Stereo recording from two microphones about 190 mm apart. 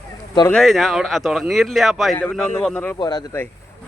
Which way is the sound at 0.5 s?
Centre (ahead or behind).